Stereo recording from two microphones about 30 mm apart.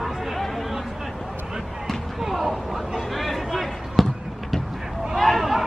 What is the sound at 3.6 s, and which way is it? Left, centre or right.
Basketball bounce, centre.